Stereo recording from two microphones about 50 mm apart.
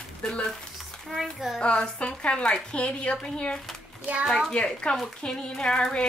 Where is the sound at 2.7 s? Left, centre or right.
Left.